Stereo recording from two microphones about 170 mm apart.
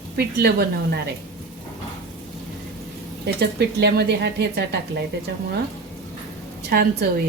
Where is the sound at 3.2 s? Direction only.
75° right (ahead or behind).